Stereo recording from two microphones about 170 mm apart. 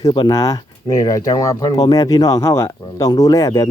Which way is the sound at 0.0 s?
25° left (ahead or behind).